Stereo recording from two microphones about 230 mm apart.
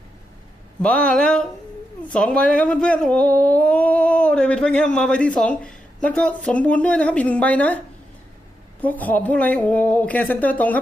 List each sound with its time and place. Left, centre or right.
0.8 s speech: centre
8.8 s a woman's voice: centre